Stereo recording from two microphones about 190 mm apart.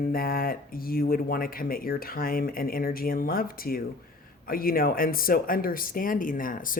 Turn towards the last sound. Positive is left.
turn(degrees=45)  # may be behind; listen again after turning